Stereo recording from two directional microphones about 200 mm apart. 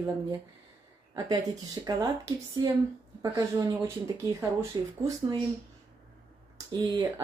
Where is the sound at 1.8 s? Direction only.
20° right (ahead or behind).